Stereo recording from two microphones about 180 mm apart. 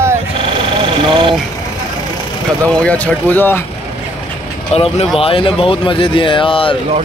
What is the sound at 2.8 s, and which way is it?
Music, 5° left (ahead or behind).